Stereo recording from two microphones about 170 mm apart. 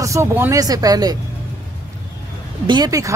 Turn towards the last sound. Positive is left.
turn(degrees=-20)  # may be behind; listen again after turning